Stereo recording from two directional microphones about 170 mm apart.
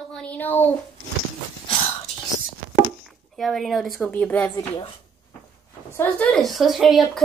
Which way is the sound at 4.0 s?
10° left (ahead or behind).